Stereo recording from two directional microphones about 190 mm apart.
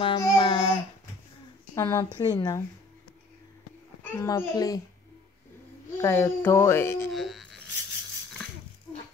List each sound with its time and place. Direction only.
0.0 s child singing: 20° left (ahead or behind)
1.8 s a child's voice: 15° left (ahead or behind)
4.0 s a child's voice: 15° left (ahead or behind)
5.9 s speech: 15° left (ahead or behind)
7.1 s a sound: centre (ahead or behind)